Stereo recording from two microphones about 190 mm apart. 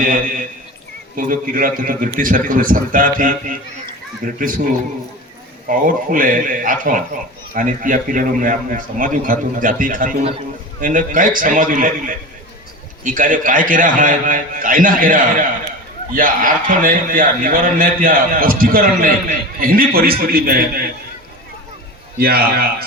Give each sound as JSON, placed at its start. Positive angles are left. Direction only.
{"t": 1.1, "sound": "a man's voice", "side_deg": -45}
{"t": 5.6, "sound": "a man's voice", "side_deg": -45}
{"t": 22.2, "sound": "a man's voice", "side_deg": -55}